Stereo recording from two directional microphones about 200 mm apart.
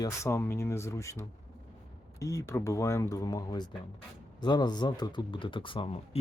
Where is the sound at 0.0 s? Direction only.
15° left (ahead or behind).